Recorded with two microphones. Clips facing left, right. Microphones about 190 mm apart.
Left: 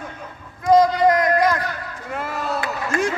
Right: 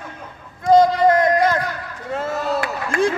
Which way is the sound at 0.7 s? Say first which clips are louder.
Right 1 dB; 25° right (ahead or behind).